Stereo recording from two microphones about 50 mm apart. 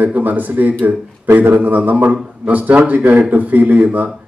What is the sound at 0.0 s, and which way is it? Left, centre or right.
A man's voice, right.